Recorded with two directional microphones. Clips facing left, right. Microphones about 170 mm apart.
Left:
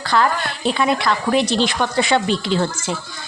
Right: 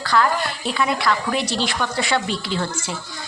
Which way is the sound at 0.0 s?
25° left (ahead or behind).